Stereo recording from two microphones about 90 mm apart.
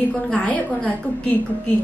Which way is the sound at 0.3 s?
15° left (ahead or behind).